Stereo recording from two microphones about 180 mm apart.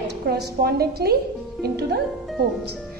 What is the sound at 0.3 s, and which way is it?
A woman's voice, 65° right (ahead or behind).